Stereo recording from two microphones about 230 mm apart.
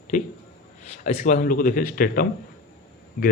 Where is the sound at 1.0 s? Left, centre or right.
Left.